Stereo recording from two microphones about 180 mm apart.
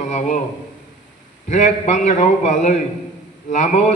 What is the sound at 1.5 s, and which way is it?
A man's voice, 40° left (ahead or behind).